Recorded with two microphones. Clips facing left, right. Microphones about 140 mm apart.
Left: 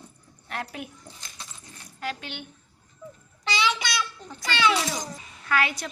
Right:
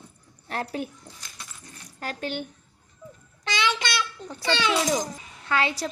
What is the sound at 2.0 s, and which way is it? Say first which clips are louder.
Speech: right 3 dB; 45° right (ahead or behind).